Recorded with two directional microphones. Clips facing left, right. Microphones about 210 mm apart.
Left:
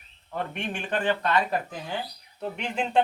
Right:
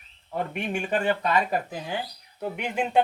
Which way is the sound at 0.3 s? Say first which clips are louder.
Right 2 dB; 10° right (ahead or behind).